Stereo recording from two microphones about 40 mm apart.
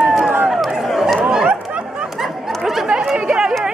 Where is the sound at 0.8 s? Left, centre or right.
Centre.